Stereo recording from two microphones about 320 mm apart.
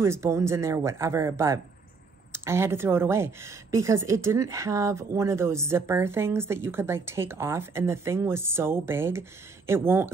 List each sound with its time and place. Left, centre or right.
0.0 s speech: centre